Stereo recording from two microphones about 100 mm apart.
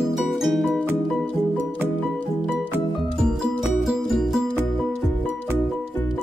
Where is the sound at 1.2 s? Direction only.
15° left (ahead or behind).